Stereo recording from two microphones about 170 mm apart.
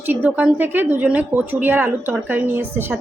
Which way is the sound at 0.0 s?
10° right (ahead or behind).